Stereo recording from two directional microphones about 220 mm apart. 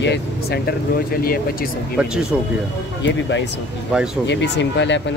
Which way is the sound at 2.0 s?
5° right (ahead or behind).